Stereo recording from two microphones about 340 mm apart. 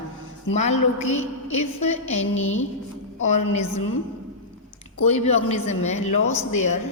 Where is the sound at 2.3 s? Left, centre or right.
Left.